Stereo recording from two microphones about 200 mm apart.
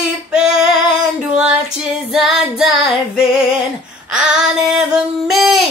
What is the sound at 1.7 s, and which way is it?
Female singing, centre (ahead or behind).